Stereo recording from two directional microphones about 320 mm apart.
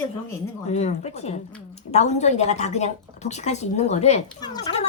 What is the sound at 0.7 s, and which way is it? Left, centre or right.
A woman's voice, left.